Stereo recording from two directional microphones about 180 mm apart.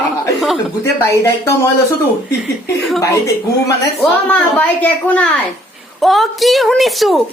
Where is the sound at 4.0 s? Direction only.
5° left (ahead or behind).